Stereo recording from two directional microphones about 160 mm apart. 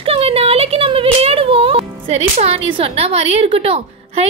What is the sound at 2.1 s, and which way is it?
A woman's voice, 40° right (ahead or behind).